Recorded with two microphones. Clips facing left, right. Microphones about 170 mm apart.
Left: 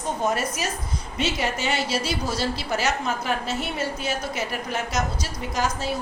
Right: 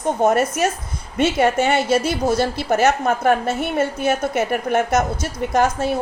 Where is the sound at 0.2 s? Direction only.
55° right (ahead or behind).